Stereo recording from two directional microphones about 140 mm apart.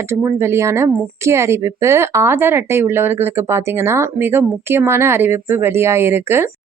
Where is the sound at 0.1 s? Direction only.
20° right (ahead or behind).